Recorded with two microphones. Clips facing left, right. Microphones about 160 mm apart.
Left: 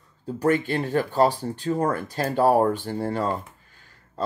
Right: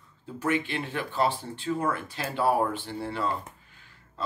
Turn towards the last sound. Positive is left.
turn(degrees=45)  # may be behind; listen again after turning